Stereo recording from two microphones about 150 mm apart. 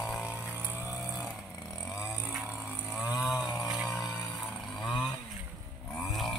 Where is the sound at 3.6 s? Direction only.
5° right (ahead or behind).